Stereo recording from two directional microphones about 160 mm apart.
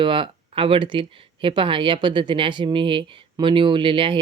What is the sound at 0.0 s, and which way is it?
A man's voice, 30° right (ahead or behind).